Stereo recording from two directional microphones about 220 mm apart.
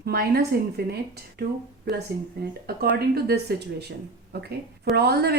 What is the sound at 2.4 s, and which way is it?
A woman's voice, 45° right (ahead or behind).